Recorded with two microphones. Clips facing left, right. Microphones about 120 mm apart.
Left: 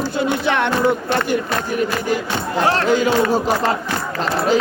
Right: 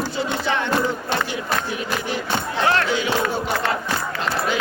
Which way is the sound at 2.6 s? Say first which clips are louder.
Left 5 dB; 40° left (ahead or behind).